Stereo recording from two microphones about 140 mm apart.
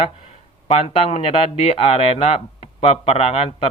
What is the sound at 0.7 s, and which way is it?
Speech, 45° left (ahead or behind).